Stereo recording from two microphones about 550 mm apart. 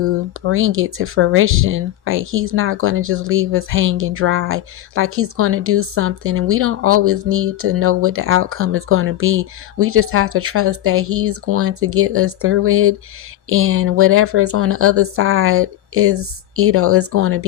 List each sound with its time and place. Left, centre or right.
0.0 s speech: right